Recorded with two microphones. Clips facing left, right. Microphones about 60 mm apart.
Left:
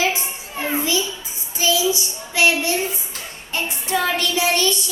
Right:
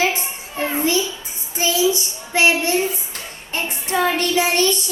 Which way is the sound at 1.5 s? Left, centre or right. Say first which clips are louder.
Right 1 dB; right.